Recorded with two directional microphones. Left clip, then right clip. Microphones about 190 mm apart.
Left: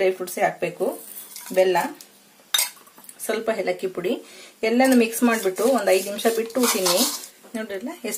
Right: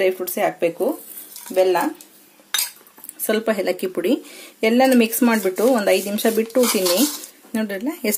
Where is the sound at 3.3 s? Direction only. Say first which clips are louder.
Right 4 dB; 50° right (ahead or behind).